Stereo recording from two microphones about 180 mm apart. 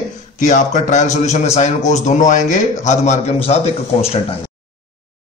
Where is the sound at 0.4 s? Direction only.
45° left (ahead or behind).